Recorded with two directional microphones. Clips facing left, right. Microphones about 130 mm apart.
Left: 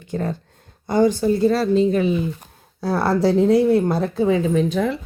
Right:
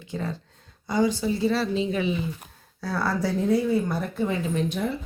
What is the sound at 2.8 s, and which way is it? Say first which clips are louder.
Speech: left 8 dB; 65° left (ahead or behind).